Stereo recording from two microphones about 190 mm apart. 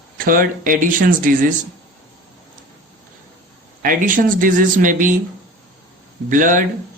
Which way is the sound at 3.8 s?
45° right (ahead or behind).